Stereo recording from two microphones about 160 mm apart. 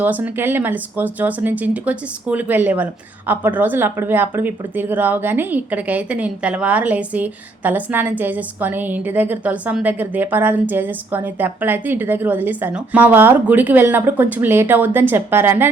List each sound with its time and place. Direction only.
0.0 s speech: 10° right (ahead or behind)